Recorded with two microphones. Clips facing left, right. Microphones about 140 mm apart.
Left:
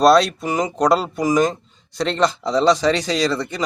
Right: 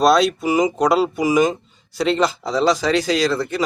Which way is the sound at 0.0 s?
Centre (ahead or behind).